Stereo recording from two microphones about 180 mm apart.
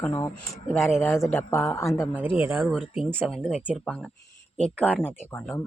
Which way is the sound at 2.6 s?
Centre (ahead or behind).